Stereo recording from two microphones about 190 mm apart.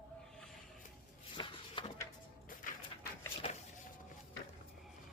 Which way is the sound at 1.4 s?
25° left (ahead or behind).